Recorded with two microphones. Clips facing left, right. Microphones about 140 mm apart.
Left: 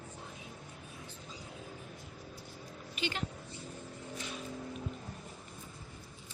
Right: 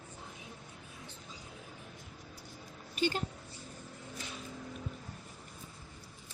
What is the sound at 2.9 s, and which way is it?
Speech, 40° right (ahead or behind).